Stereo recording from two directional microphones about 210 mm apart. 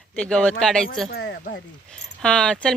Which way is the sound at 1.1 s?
50° left (ahead or behind).